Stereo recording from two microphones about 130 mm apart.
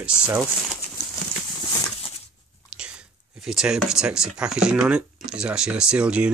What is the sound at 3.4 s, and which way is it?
Speech, 5° right (ahead or behind).